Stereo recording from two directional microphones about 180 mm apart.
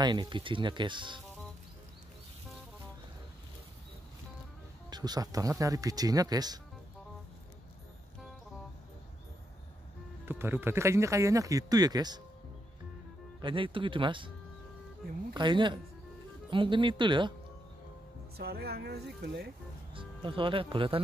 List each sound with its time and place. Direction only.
0.0 s speech: 25° right (ahead or behind)
4.8 s speech: 20° right (ahead or behind)
10.2 s speech: 10° right (ahead or behind)
13.4 s speech: 30° right (ahead or behind)
15.3 s speech: 25° right (ahead or behind)
18.4 s speech: 60° right (ahead or behind)
19.9 s speech: 30° right (ahead or behind)